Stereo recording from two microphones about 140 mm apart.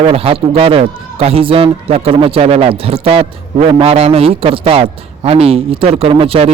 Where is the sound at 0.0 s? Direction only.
45° right (ahead or behind).